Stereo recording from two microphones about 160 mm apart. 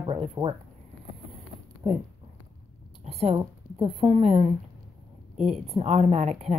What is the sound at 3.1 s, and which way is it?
Speech, 40° right (ahead or behind).